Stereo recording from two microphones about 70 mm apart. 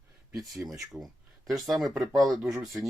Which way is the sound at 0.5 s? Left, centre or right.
Centre.